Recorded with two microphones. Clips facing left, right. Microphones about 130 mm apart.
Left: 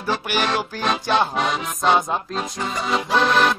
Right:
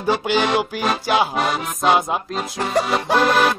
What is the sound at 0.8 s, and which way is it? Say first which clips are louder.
Music: left 2 dB; 5° right (ahead or behind).